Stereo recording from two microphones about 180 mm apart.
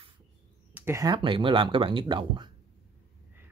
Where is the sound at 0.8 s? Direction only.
15° right (ahead or behind).